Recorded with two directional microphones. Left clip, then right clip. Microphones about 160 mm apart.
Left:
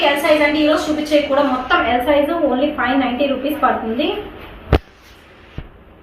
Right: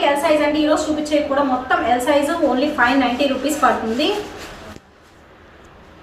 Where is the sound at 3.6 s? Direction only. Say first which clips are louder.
Even; 10° right (ahead or behind).